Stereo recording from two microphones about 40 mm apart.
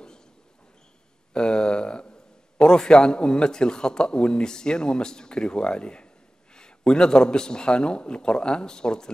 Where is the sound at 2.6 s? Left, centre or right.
Centre.